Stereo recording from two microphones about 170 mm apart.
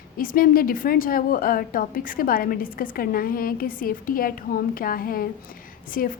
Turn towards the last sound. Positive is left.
turn(degrees=55)  # may be behind; listen again after turning